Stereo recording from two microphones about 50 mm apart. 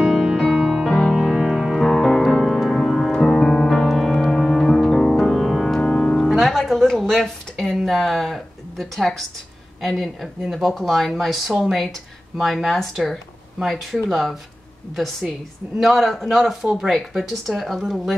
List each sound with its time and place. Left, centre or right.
0.0 s music: centre
1.1 s music: centre
1.9 s music: centre
5.8 s music: centre
6.2 s music: centre
9.8 s speech: centre